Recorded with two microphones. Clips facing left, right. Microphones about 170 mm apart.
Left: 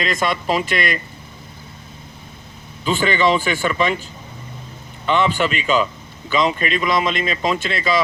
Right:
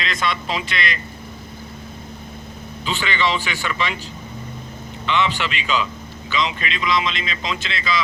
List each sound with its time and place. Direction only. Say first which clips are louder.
0.0 s speech: left 4 dB; 45° left (ahead or behind)
2.8 s speech: left 6 dB; 45° left (ahead or behind)
5.0 s speech: left 4 dB; 45° left (ahead or behind)